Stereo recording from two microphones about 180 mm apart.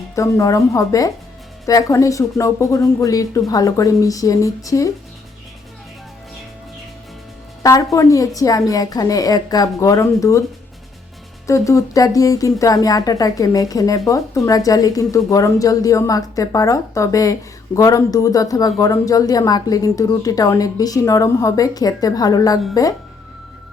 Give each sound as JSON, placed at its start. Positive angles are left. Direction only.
{"t": 0.2, "sound": "speech", "side_deg": 20}
{"t": 7.6, "sound": "a woman's voice", "side_deg": 20}
{"t": 11.4, "sound": "speech", "side_deg": 15}